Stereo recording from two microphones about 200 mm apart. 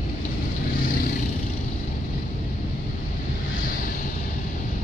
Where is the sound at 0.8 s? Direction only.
45° left (ahead or behind).